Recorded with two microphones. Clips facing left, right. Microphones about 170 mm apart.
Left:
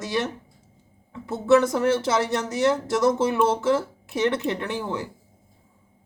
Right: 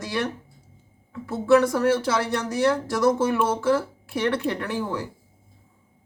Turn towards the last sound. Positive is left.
turn(degrees=20)  # may be behind; listen again after turning